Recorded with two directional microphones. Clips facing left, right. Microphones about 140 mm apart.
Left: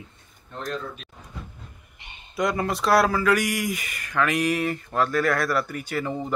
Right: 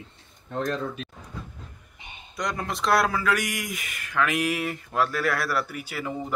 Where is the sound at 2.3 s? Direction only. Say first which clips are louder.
Left 6 dB; 5° left (ahead or behind).